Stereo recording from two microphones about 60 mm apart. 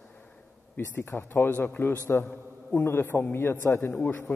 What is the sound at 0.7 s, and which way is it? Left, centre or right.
A man's voice, left.